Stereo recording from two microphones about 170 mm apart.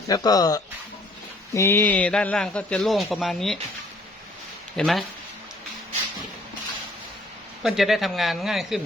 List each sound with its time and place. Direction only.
0.1 s a man's voice: 20° left (ahead or behind); by 3.6 s centre (ahead or behind)
4.8 s a man's voice: centre (ahead or behind)
7.6 s a man's voice: centre (ahead or behind)